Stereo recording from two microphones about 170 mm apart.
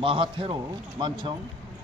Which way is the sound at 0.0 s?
30° right (ahead or behind).